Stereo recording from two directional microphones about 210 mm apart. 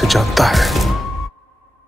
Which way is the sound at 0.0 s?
Centre (ahead or behind).